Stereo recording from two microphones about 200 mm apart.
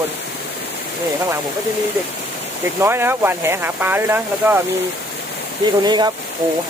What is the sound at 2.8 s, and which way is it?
Speech, 10° right (ahead or behind).